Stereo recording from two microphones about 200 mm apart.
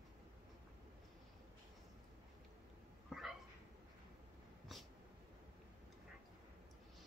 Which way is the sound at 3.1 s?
Centre (ahead or behind).